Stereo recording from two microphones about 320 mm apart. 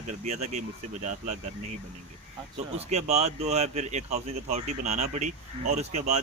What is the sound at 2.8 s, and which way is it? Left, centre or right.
Speech, centre.